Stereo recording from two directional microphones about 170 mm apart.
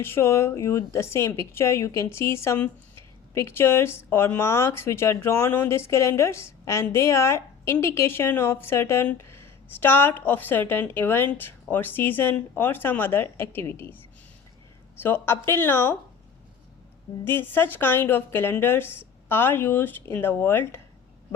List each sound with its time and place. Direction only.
0.0 s speech: 15° left (ahead or behind)
15.0 s speech: 15° left (ahead or behind)
17.2 s speech: 10° left (ahead or behind)